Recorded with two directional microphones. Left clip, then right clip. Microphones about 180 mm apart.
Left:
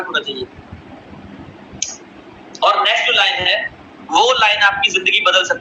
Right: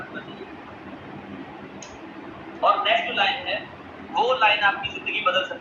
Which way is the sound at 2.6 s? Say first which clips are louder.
Left 7 dB; 55° left (ahead or behind).